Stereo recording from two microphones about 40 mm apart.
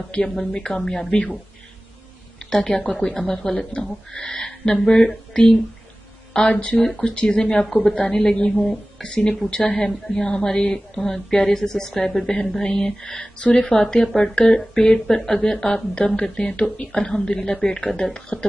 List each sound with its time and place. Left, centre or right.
0.5 s speech: left
1.1 s speech: left
2.5 s a woman's voice: centre
4.1 s speech: left
6.5 s speech: left
6.8 s a woman's voice: centre
7.2 s a woman's voice: centre
10.2 s a woman's voice: left